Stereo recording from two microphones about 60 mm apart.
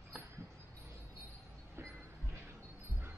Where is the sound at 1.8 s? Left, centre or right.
Right.